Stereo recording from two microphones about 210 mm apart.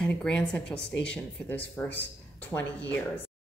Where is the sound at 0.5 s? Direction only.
5° left (ahead or behind).